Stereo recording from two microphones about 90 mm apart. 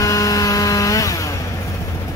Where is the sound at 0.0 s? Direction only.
40° left (ahead or behind).